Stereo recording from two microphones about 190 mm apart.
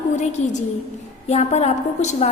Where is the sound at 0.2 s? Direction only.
40° left (ahead or behind).